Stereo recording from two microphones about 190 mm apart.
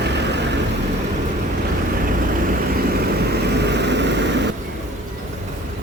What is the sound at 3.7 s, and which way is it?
Vehicle, 65° right (ahead or behind).